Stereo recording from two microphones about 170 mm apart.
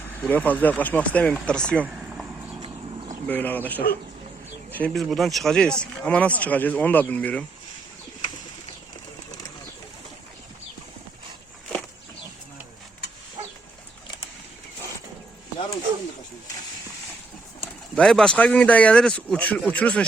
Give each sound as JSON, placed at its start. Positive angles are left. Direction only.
{"t": 0.0, "sound": "speech", "side_deg": 10}
{"t": 1.8, "sound": "a sound", "side_deg": -10}
{"t": 2.6, "sound": "clip-clop", "side_deg": -30}
{"t": 3.2, "sound": "speech", "side_deg": 10}
{"t": 17.9, "sound": "speech", "side_deg": 5}